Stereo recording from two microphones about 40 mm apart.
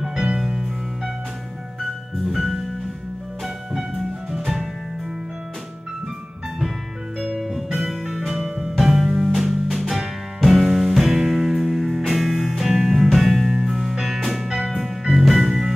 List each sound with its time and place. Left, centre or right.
0.0 s music: centre
1.8 s music: centre
7.2 s music: centre
8.5 s music: right